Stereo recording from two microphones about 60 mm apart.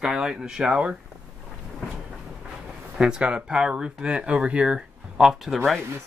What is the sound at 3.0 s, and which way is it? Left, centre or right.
Speech, centre.